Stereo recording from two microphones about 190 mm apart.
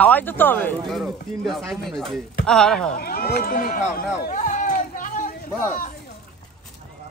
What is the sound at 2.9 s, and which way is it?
Speech, 55° left (ahead or behind).